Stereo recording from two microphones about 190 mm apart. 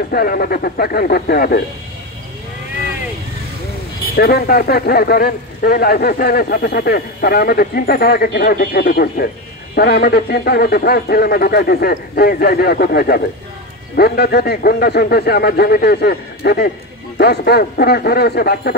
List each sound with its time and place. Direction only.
0.1 s speech: 50° left (ahead or behind)
4.2 s speech: 55° left (ahead or behind)